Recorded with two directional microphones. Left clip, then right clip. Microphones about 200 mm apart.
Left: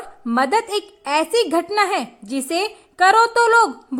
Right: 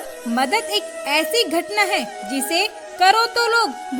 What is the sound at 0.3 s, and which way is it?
A woman's voice, 25° right (ahead or behind).